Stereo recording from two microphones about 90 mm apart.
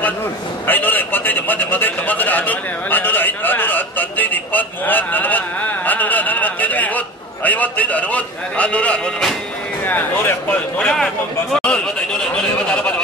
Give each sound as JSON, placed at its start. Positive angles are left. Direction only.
{"t": 0.7, "sound": "a man's voice", "side_deg": 20}
{"t": 11.6, "sound": "a man's voice", "side_deg": 10}